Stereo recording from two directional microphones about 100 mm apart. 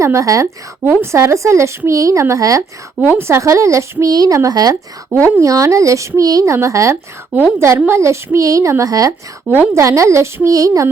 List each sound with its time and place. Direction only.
0.0 s a woman's voice: 30° right (ahead or behind)
3.0 s a woman's voice: 20° right (ahead or behind)
9.5 s a woman's voice: 20° right (ahead or behind)
9.8 s speech: 30° right (ahead or behind)